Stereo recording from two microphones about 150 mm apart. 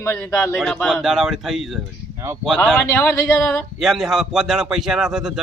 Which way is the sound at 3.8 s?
Centre (ahead or behind).